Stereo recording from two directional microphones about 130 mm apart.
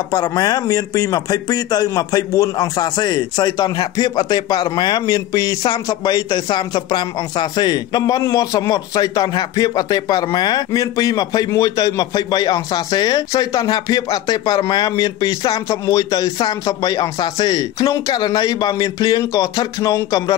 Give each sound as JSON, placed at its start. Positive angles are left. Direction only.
{"t": 0.1, "sound": "speech", "side_deg": 30}